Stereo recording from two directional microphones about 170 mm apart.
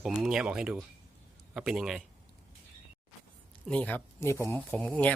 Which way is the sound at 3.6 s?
10° left (ahead or behind).